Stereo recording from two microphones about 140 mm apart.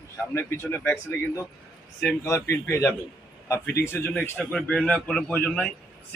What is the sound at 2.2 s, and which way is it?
Speech, 20° left (ahead or behind).